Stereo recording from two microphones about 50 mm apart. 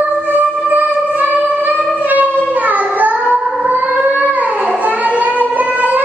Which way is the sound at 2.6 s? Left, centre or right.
Right.